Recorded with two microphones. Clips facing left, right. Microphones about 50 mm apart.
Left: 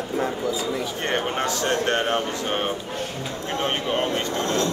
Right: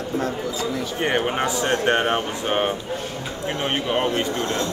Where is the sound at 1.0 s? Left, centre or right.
Centre.